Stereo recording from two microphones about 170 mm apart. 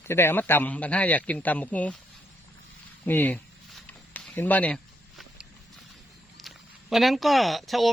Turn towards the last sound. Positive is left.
turn(degrees=0)  # may be behind; listen again after turning